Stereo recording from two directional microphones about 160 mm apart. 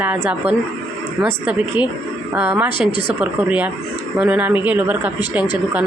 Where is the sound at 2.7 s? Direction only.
30° left (ahead or behind).